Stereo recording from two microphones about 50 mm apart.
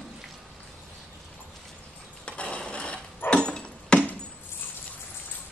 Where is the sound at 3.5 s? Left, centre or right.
Centre.